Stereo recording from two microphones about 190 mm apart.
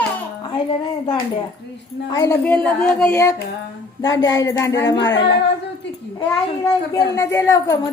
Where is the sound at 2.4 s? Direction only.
10° left (ahead or behind).